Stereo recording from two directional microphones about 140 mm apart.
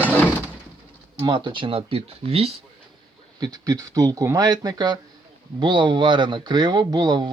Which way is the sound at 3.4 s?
25° right (ahead or behind).